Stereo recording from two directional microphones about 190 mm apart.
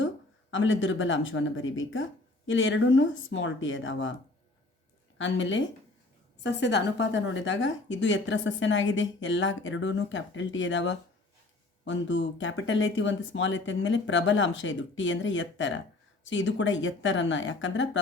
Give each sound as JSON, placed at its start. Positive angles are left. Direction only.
{"t": 0.5, "sound": "speech", "side_deg": 90}
{"t": 5.1, "sound": "speech", "side_deg": 80}
{"t": 6.4, "sound": "a woman's voice", "side_deg": 65}